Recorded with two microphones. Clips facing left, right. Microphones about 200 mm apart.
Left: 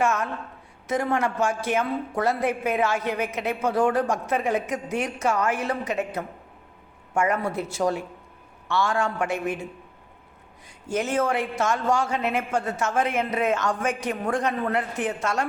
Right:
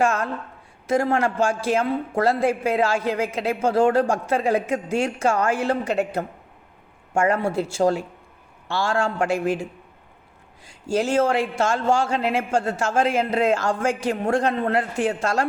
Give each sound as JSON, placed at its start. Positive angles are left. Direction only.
{"t": 0.0, "sound": "a woman's voice", "side_deg": -30}
{"t": 10.8, "sound": "a woman's voice", "side_deg": -30}